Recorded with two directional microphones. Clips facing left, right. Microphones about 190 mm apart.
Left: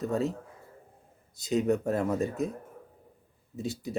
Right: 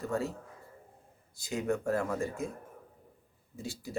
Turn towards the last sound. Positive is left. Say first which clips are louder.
# left 5 dB
turn(degrees=20)  # may be behind; listen again after turning